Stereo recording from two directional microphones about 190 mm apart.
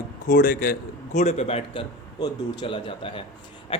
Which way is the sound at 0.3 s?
50° left (ahead or behind).